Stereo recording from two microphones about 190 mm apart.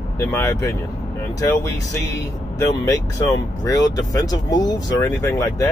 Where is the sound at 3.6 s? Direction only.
20° left (ahead or behind).